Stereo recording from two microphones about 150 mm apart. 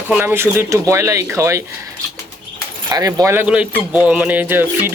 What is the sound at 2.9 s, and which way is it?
Speech, 25° right (ahead or behind).